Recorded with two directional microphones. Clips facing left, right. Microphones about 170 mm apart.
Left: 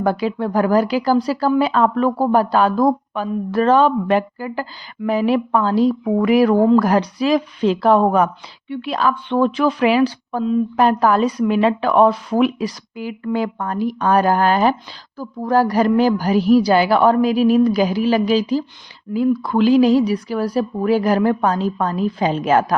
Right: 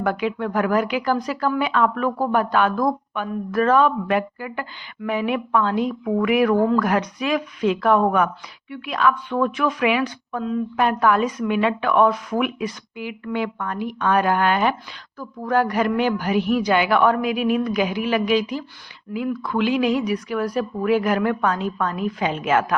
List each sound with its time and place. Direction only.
0.0 s speech: 35° left (ahead or behind)